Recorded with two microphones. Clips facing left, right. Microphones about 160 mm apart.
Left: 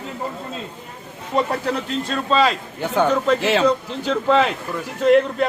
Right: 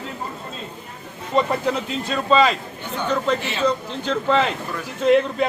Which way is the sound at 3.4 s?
90° left.